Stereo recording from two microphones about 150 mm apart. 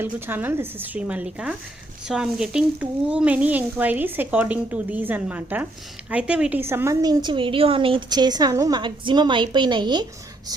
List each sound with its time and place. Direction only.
0.0 s a woman's voice: 15° right (ahead or behind); by 10.1 s 30° right (ahead or behind)